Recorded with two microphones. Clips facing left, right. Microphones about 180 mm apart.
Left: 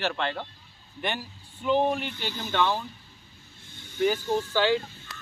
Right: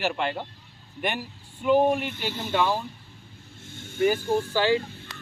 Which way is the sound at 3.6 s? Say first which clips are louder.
Right 3 dB; 50° right (ahead or behind).